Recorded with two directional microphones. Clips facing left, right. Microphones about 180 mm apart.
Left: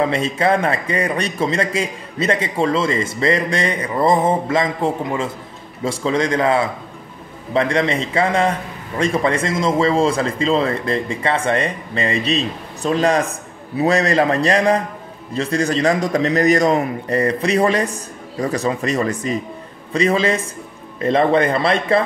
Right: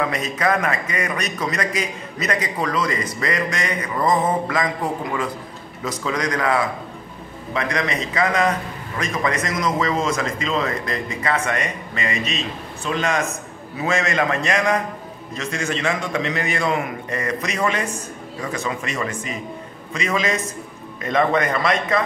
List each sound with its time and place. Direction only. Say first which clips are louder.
0.0 s a man's voice: left 4 dB; 30° left (ahead or behind)